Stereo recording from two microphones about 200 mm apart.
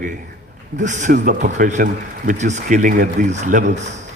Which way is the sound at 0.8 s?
40° right (ahead or behind).